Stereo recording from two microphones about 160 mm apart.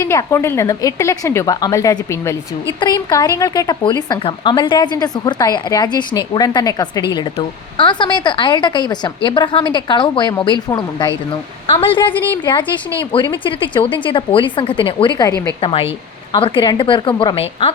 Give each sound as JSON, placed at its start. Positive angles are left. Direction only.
{"t": 0.0, "sound": "speech", "side_deg": 20}
{"t": 13.4, "sound": "speech", "side_deg": 30}